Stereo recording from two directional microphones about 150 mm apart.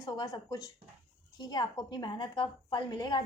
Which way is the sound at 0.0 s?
25° left (ahead or behind).